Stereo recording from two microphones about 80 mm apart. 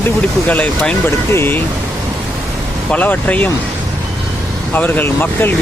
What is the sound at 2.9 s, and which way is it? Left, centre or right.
Speech, left.